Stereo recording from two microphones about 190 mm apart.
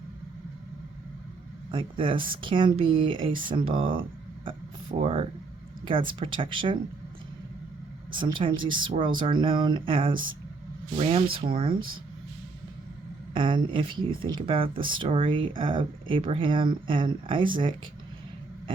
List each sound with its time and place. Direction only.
1.7 s speech: 25° right (ahead or behind)
8.1 s speech: 25° right (ahead or behind)
13.3 s speech: 25° right (ahead or behind)